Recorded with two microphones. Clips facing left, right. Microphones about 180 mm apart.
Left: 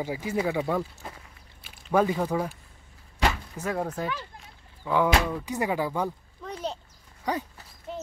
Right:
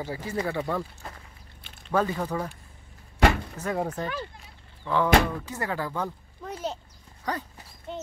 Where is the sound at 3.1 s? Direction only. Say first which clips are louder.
Right 5 dB; 55° right (ahead or behind).